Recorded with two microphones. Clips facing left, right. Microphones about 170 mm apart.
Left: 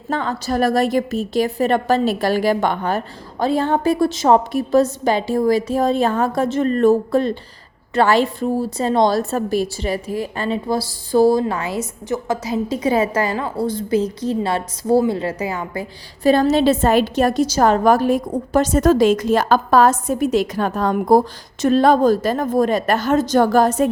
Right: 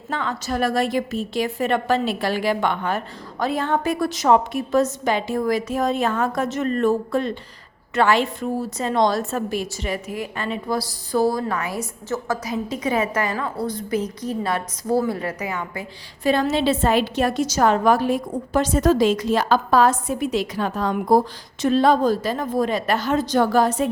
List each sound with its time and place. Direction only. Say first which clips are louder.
0.1 s a woman's voice: left 4 dB; 35° left (ahead or behind); by 12.4 s 20° left (ahead or behind)
12.5 s a woman's voice: left 6 dB; 30° left (ahead or behind)